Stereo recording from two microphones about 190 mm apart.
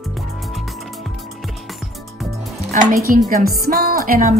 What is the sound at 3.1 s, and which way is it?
Speech, 50° right (ahead or behind).